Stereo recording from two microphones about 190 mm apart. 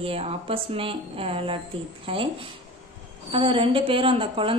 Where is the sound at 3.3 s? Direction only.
30° right (ahead or behind).